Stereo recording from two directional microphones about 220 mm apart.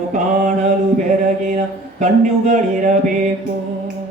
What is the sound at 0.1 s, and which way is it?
Speech, 35° right (ahead or behind).